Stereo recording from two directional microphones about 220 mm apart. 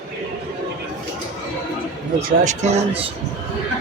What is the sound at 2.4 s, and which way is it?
Speech, 30° right (ahead or behind).